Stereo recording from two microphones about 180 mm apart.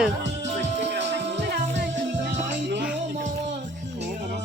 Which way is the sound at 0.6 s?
80° right.